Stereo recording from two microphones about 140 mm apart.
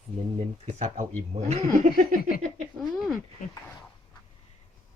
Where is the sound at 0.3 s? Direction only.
50° right (ahead or behind); by 2.3 s 75° right (ahead or behind).